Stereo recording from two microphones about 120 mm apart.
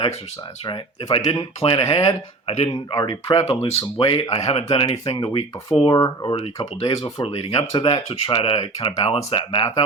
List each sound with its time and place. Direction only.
0.6 s speech: 40° left (ahead or behind)
2.9 s speech: 35° left (ahead or behind)
4.3 s speech: 65° left (ahead or behind)
4.7 s speech: 45° left (ahead or behind)
6.3 s speech: 55° left (ahead or behind)